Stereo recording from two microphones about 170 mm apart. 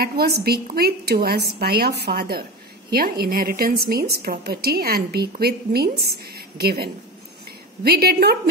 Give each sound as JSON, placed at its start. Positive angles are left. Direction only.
{"t": 0.0, "sound": "a woman's voice", "side_deg": -65}